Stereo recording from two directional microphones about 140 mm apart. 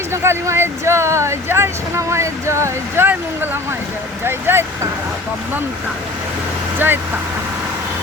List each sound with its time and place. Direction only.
0.1 s speech: 20° right (ahead or behind)
6.7 s speech: 15° right (ahead or behind)